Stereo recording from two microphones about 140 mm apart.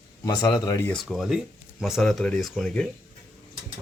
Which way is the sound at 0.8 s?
5° left (ahead or behind).